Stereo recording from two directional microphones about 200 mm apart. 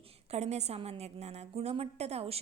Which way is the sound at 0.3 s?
35° right (ahead or behind).